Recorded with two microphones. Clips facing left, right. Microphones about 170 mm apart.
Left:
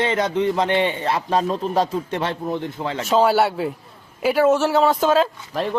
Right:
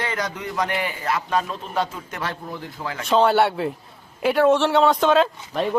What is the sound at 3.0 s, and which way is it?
Speech, 5° left (ahead or behind).